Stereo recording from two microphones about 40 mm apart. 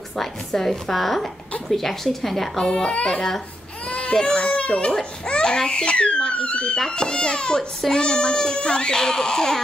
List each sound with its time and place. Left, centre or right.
0.1 s a child's voice: centre
2.5 s speech: centre
3.2 s a child's voice: centre
4.5 s a child's voice: left; by 9.6 s centre